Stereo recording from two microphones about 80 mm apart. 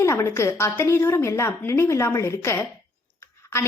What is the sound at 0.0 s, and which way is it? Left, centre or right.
A woman's voice, left.